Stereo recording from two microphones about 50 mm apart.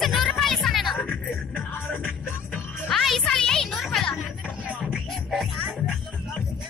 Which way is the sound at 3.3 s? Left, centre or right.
Centre.